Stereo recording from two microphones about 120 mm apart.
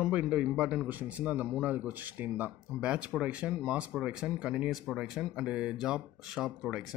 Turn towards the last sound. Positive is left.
turn(degrees=0)  # may be behind; listen again after turning